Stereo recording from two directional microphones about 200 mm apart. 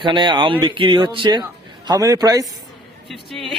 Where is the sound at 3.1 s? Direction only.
Centre (ahead or behind).